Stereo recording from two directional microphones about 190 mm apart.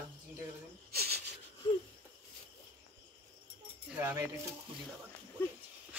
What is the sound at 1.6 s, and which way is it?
Wheeze, 25° left (ahead or behind).